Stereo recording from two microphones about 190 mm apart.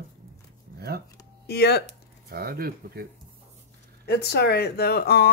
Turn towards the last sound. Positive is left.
turn(degrees=55)  # may be behind; listen again after turning